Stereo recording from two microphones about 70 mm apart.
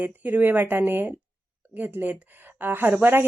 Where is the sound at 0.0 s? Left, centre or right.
Right.